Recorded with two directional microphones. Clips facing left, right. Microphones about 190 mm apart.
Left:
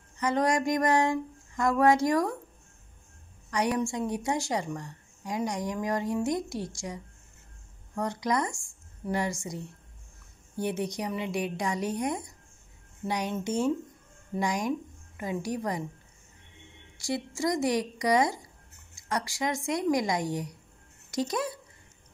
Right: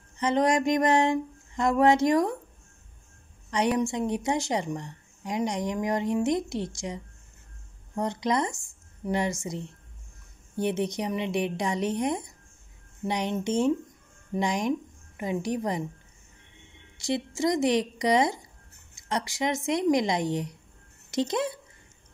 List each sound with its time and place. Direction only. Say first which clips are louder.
0.2 s a woman's voice: right 3 dB; 20° right (ahead or behind)
3.4 s a woman's voice: right 3 dB; 25° right (ahead or behind)
10.6 s a woman's voice: right 3 dB; 20° right (ahead or behind)
17.0 s a woman's voice: right 3 dB; 20° right (ahead or behind)